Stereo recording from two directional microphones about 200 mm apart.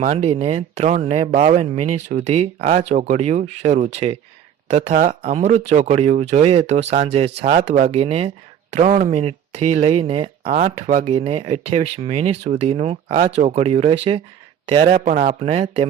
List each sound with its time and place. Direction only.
0.0 s speech: 35° right (ahead or behind)